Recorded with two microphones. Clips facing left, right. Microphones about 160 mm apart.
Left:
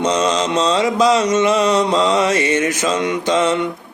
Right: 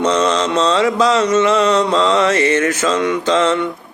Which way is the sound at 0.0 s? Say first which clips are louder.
Right 2 dB; 15° left (ahead or behind).